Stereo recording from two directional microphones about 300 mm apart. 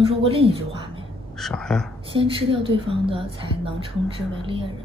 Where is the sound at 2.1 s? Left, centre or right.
Centre.